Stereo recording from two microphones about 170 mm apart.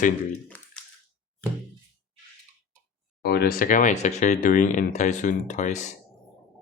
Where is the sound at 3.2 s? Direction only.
60° left (ahead or behind).